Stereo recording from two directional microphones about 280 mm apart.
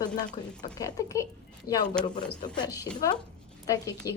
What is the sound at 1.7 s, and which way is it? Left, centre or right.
Speech, left.